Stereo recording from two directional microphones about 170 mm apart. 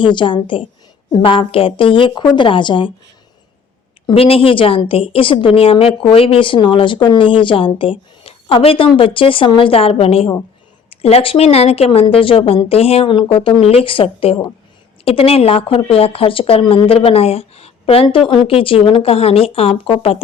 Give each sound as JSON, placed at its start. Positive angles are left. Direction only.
{"t": 0.0, "sound": "a woman's voice", "side_deg": 30}
{"t": 4.0, "sound": "a woman's voice", "side_deg": 35}